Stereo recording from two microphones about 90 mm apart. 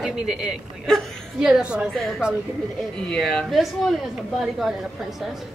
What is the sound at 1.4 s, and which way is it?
Speech, 10° right (ahead or behind).